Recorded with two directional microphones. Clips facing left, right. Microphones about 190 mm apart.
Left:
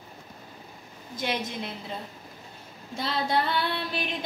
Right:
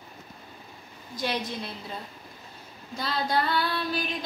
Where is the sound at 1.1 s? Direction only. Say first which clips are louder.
Even; 20° left (ahead or behind).